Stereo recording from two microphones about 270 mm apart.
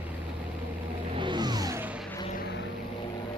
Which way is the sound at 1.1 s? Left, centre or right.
Centre.